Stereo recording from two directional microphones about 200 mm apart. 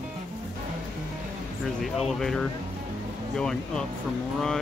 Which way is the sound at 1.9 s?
Centre (ahead or behind).